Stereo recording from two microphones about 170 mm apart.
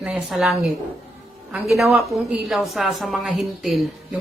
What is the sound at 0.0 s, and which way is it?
A woman's voice, centre (ahead or behind).